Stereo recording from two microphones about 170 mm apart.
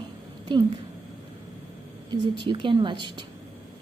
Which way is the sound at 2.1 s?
25° right (ahead or behind).